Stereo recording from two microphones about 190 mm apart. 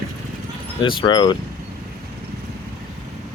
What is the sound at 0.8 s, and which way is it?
Speech, 25° left (ahead or behind).